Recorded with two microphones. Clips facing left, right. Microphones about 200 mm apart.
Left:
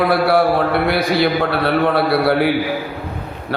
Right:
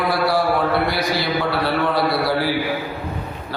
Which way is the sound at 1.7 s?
60° left (ahead or behind).